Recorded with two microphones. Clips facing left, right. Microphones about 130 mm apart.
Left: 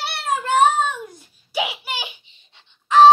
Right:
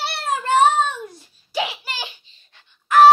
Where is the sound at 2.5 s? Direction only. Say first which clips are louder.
Even; 20° left (ahead or behind).